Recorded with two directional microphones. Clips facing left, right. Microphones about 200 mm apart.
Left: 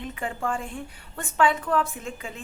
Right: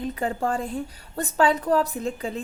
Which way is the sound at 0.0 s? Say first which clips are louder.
Right 5 dB; 35° right (ahead or behind).